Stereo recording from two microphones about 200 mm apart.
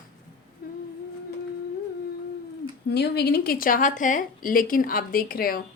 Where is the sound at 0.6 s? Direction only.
50° left (ahead or behind).